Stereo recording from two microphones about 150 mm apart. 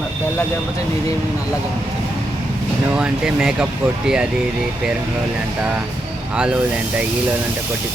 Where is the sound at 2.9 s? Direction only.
5° right (ahead or behind).